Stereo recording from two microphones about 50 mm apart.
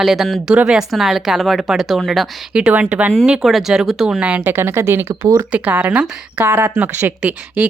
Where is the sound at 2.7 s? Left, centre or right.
Right.